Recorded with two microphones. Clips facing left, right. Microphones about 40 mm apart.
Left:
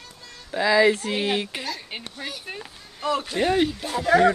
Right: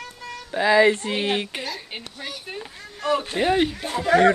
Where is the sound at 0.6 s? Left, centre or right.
Centre.